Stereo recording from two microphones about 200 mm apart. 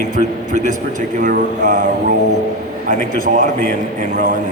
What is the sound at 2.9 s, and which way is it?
A man's voice, 45° right (ahead or behind).